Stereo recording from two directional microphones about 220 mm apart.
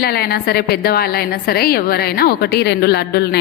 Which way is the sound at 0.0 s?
45° left (ahead or behind).